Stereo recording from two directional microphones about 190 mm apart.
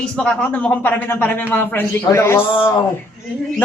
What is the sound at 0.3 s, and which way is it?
Speech, 5° left (ahead or behind).